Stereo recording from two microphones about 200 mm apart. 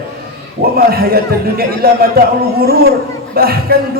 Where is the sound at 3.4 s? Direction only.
50° right (ahead or behind).